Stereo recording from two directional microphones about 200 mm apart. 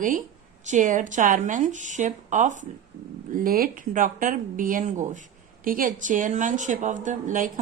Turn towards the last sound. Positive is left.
turn(degrees=-40)  # may be behind; listen again after turning